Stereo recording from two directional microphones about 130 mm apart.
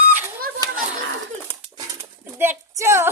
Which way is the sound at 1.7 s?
20° right (ahead or behind).